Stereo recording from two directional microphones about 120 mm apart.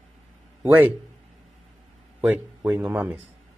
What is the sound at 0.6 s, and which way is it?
Speech, 10° right (ahead or behind).